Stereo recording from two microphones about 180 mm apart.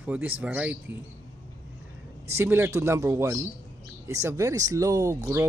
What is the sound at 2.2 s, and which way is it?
Speech, 10° right (ahead or behind).